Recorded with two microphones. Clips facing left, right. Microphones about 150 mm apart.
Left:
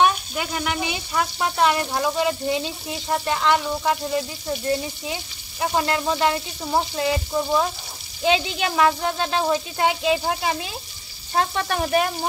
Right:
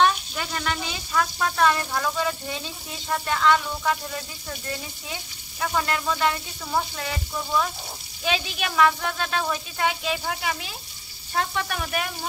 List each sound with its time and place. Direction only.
0.0 s speech: 15° left (ahead or behind); by 12.1 s 35° left (ahead or behind)